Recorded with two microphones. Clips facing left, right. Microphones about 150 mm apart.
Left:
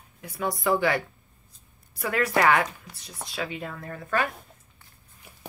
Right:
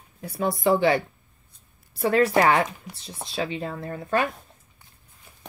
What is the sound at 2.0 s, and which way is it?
Speech, 30° right (ahead or behind).